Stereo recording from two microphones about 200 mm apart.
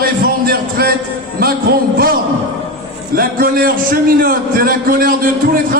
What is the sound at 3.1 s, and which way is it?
A man's voice, 45° right (ahead or behind).